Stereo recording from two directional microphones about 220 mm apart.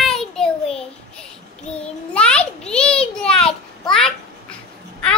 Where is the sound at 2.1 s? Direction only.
5° left (ahead or behind).